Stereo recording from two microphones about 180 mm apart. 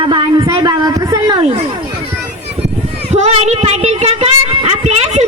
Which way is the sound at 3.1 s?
35° right (ahead or behind).